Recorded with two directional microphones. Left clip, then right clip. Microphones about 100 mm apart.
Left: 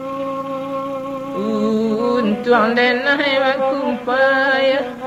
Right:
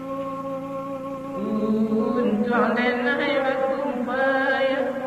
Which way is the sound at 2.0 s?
30° right (ahead or behind).